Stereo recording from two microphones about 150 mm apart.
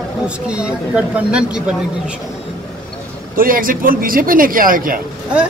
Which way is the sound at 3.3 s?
70° right (ahead or behind).